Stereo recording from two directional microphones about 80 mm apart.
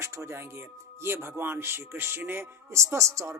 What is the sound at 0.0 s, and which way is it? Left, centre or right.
Speech, right.